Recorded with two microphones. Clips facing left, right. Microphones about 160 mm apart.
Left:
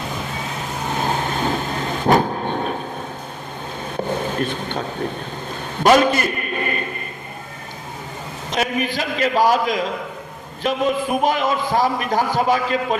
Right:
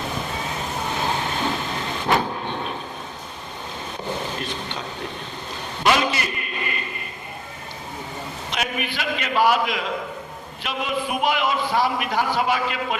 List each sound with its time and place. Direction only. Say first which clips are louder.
1.0 s vehicle: left 4 dB; 45° left (ahead or behind)
4.4 s a man's voice: left 7 dB; 50° left (ahead or behind)
5.8 s a sound: left 7 dB; 45° left (ahead or behind)
8.4 s a man's voice: left 7 dB; 40° left (ahead or behind)